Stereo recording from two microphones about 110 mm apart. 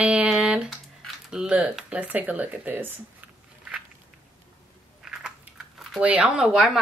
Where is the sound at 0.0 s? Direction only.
10° right (ahead or behind).